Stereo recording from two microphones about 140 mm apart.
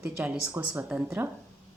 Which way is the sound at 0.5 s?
20° right (ahead or behind).